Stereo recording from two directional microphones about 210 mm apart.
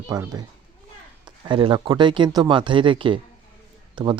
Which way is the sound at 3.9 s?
20° right (ahead or behind).